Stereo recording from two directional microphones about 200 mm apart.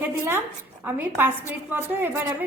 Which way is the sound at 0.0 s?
10° right (ahead or behind).